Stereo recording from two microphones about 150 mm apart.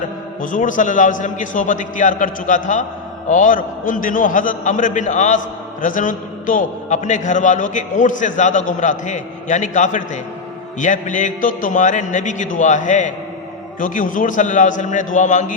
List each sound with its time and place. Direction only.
0.4 s a man's voice: 60° left (ahead or behind)